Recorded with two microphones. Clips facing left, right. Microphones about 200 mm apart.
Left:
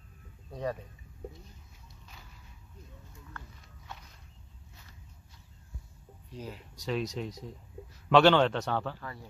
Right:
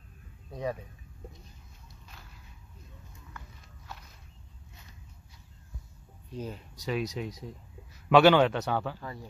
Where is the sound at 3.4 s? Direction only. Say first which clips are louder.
Even; centre (ahead or behind).